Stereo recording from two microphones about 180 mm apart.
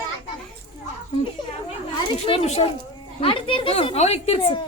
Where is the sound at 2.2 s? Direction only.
35° left (ahead or behind).